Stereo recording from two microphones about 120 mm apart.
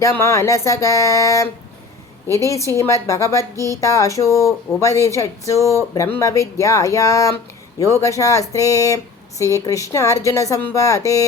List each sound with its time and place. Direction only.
0.0 s a woman's voice: 25° left (ahead or behind)
2.6 s a woman's voice: 25° left (ahead or behind)